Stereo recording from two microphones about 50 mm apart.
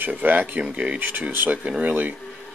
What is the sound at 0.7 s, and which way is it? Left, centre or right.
Speech, right.